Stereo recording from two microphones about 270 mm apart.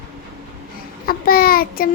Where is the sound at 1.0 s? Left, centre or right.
Left.